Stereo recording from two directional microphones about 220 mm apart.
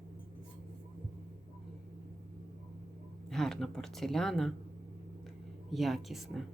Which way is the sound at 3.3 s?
Centre (ahead or behind).